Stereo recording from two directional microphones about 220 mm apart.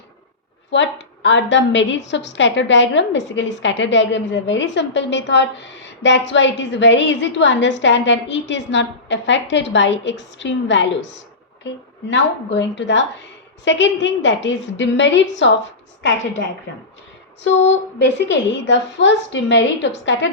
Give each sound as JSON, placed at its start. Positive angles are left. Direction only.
{"t": 0.7, "sound": "a woman's voice", "side_deg": 55}
{"t": 17.4, "sound": "a woman's voice", "side_deg": 55}